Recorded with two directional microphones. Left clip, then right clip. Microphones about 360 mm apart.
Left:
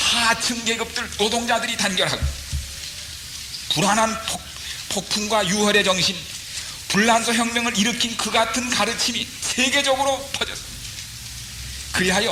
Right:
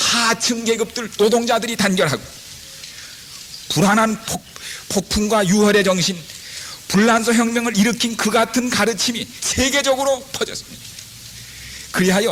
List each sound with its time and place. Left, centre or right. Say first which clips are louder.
0.0 s music: right 2 dB; right
1.2 s music: right 5 dB; right
3.7 s music: right 3 dB; right
11.9 s music: right 3 dB; right